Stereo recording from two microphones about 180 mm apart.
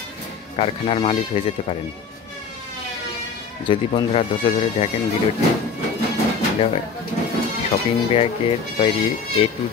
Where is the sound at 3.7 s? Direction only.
30° left (ahead or behind).